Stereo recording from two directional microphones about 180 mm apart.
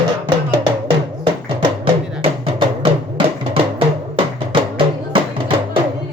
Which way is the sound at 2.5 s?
30° right (ahead or behind).